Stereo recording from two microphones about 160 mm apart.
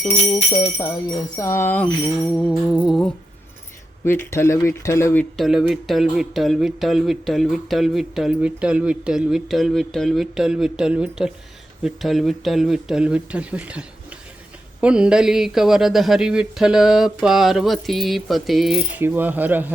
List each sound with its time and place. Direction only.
0.2 s speech: 45° left (ahead or behind)
1.4 s speech: 15° left (ahead or behind)
2.2 s speech: centre (ahead or behind)
4.0 s speech: 15° left (ahead or behind)
5.4 s speech: 5° right (ahead or behind)